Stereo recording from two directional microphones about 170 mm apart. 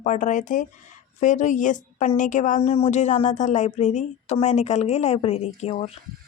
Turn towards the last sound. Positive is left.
turn(degrees=40)  # may be behind; listen again after turning